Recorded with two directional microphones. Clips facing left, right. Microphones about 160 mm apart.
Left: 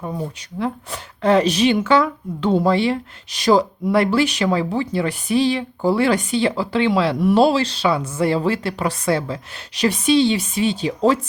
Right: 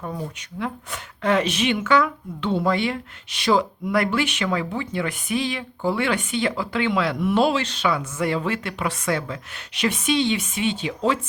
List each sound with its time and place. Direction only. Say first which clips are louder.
0.3 s a woman's voice: left 5 dB; 35° left (ahead or behind)